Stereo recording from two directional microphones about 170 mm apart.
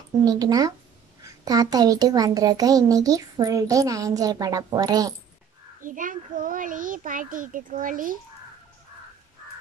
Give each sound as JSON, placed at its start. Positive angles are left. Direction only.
{"t": 0.2, "sound": "a woman's voice", "side_deg": -20}
{"t": 5.8, "sound": "a child's voice", "side_deg": -50}